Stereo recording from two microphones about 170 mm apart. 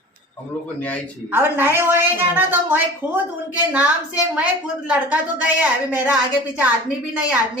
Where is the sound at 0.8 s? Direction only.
10° left (ahead or behind).